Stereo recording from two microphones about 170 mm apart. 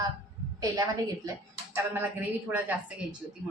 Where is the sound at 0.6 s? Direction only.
20° right (ahead or behind).